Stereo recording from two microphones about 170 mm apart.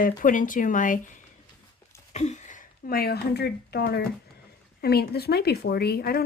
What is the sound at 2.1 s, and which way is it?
A woman's voice, 40° left (ahead or behind).